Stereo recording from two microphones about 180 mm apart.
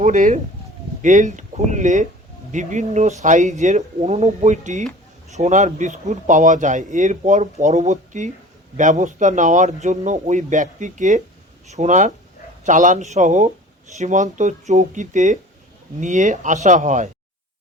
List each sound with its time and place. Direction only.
0.0 s speech: 45° right (ahead or behind)